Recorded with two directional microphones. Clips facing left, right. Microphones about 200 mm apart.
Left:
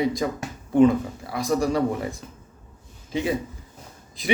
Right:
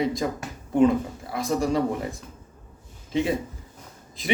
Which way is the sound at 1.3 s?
Centre (ahead or behind).